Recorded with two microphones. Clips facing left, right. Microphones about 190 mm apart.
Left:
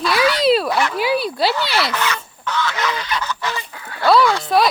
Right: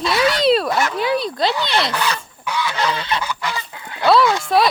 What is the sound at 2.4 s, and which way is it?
Goose, 10° right (ahead or behind).